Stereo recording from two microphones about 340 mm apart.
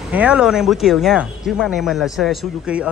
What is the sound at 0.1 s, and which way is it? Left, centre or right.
Speech, centre.